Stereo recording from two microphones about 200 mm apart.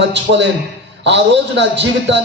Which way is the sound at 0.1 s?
60° right (ahead or behind).